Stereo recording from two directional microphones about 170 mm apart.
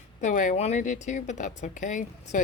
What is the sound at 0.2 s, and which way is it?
A woman's voice, 50° left (ahead or behind).